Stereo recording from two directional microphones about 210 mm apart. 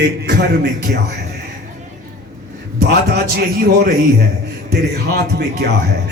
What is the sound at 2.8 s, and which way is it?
Speech, 50° right (ahead or behind).